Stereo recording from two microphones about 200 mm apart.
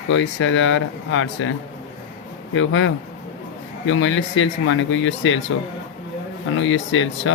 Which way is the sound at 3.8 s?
70° left (ahead or behind).